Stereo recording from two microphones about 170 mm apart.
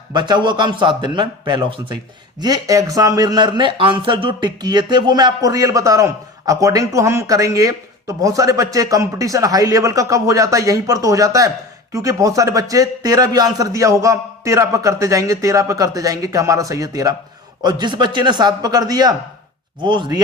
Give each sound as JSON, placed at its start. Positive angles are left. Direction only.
{"t": 0.1, "sound": "a man's voice", "side_deg": -25}